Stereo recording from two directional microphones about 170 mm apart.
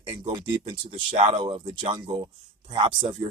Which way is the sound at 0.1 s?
25° right (ahead or behind).